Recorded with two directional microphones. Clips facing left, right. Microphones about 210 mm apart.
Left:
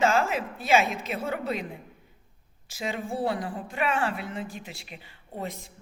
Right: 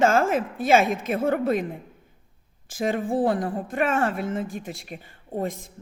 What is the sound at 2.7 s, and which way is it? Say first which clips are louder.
A woman's voice: right 7 dB; 50° right (ahead or behind).